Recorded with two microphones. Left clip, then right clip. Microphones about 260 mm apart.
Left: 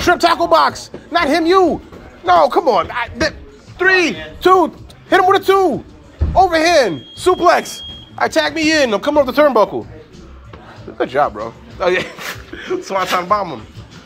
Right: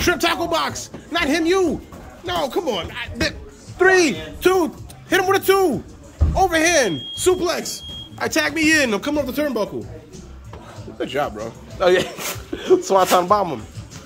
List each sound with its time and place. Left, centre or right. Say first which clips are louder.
0.0 s speech: left 6 dB; centre
3.7 s speech: left 2 dB; centre
4.4 s speech: left 7 dB; centre
11.0 s speech: left 7 dB; centre
12.6 s speech: right 3 dB; right